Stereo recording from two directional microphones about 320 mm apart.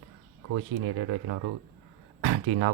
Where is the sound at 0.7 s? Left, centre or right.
Right.